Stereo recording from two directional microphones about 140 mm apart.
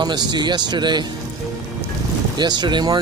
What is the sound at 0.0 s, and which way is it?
Speech, 30° right (ahead or behind).